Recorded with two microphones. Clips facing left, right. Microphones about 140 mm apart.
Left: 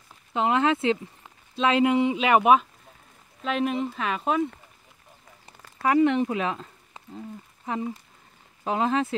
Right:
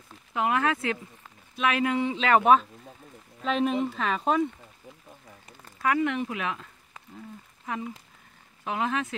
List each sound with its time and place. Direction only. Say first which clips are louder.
0.3 s speech: left 3 dB; 25° left (ahead or behind); by 4.5 s 5° left (ahead or behind)
5.8 s speech: left 5 dB; 30° left (ahead or behind)